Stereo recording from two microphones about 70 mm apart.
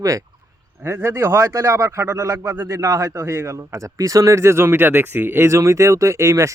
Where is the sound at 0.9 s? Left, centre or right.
Right.